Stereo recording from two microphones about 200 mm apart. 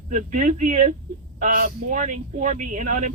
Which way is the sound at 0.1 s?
40° right (ahead or behind).